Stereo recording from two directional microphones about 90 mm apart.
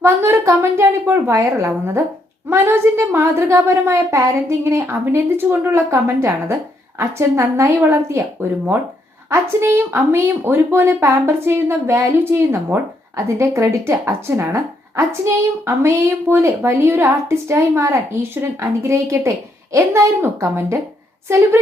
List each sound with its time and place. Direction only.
0.0 s a woman's voice: 30° right (ahead or behind)